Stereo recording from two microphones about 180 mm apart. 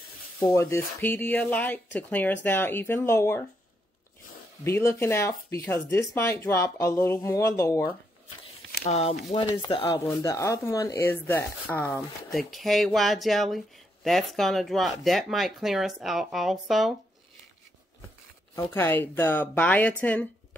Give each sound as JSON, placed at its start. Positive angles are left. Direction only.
{"t": 0.4, "sound": "speech", "side_deg": 15}
{"t": 4.6, "sound": "speech", "side_deg": 15}
{"t": 8.8, "sound": "speech", "side_deg": 35}
{"t": 9.4, "sound": "speech", "side_deg": 25}
{"t": 10.0, "sound": "speech", "side_deg": 15}
{"t": 18.5, "sound": "speech", "side_deg": 10}